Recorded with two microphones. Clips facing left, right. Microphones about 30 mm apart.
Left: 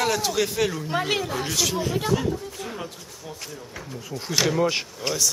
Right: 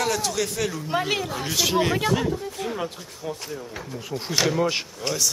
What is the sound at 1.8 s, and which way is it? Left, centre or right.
Speech, right.